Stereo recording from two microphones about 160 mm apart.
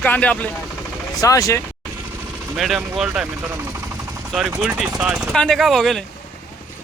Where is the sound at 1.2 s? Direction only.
20° left (ahead or behind).